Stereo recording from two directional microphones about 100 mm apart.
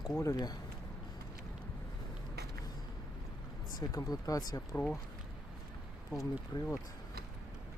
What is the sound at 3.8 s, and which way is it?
Speech, 35° left (ahead or behind).